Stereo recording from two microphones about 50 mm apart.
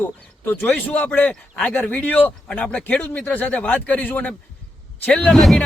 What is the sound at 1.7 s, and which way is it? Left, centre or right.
Speech, left.